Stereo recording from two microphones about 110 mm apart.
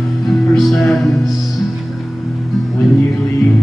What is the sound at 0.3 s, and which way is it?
Music, centre (ahead or behind).